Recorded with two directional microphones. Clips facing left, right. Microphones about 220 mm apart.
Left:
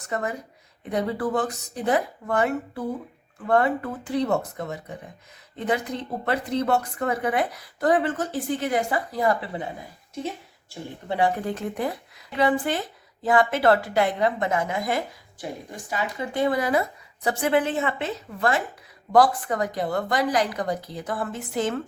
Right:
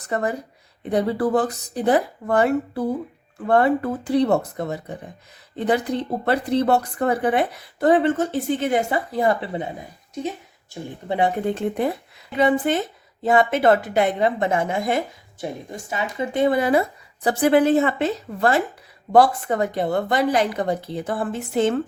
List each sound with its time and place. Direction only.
0.0 s a woman's voice: 35° right (ahead or behind)
11.1 s a woman's voice: 20° right (ahead or behind)